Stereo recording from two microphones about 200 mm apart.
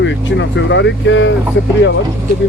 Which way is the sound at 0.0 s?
65° left (ahead or behind).